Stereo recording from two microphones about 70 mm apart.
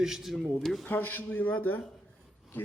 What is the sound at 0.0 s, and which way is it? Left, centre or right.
Speech, centre.